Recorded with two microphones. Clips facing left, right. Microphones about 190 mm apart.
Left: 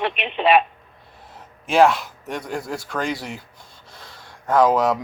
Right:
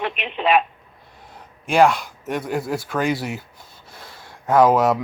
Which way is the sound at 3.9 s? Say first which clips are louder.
Right 2 dB; 10° right (ahead or behind).